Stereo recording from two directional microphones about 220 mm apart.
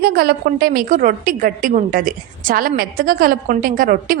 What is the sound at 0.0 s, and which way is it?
A woman's voice, 45° right (ahead or behind).